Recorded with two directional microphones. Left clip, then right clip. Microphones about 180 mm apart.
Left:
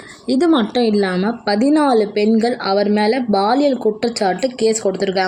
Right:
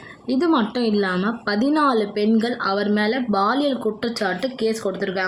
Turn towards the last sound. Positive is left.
turn(degrees=20)  # may be behind; listen again after turning